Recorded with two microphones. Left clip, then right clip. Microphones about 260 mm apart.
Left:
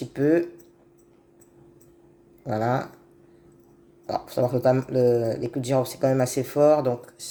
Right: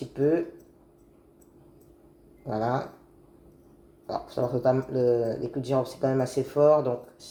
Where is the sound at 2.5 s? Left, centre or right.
Left.